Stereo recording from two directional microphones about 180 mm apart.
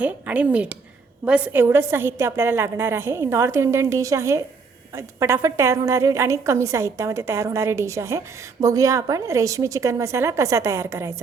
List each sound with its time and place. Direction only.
0.0 s a woman's voice: 10° right (ahead or behind)